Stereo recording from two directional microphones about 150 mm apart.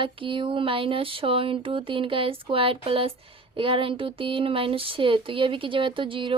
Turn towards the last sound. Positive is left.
turn(degrees=-35)  # may be behind; listen again after turning